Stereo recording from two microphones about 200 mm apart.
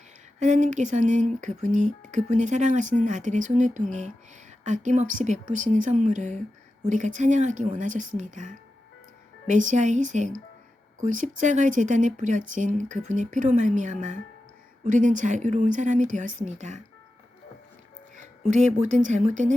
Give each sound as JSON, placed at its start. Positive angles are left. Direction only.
{"t": 0.3, "sound": "speech", "side_deg": -35}
{"t": 18.5, "sound": "speech", "side_deg": -40}